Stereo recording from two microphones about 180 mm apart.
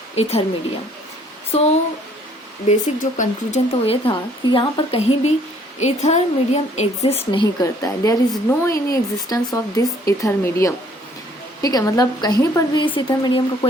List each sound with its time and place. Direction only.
0.2 s a woman's voice: 35° left (ahead or behind)
1.5 s a woman's voice: 35° left (ahead or behind)
3.8 s a woman's voice: 30° left (ahead or behind)